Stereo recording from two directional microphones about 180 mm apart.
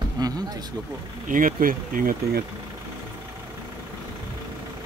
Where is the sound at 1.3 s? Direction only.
50° right (ahead or behind).